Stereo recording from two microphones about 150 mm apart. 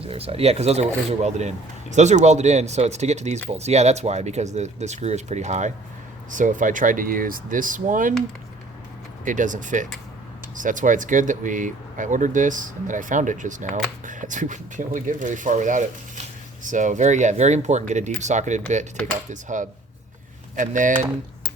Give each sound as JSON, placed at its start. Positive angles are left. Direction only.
{"t": 0.0, "sound": "speech", "side_deg": -40}
{"t": 9.2, "sound": "speech", "side_deg": -60}